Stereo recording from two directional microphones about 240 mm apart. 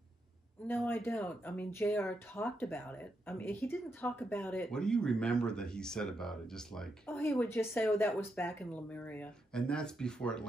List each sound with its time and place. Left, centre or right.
0.7 s speech: centre